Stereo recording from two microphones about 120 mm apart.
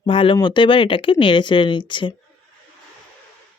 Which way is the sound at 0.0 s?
45° left (ahead or behind).